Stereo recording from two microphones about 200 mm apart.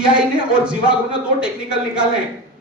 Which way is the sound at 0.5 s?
5° right (ahead or behind).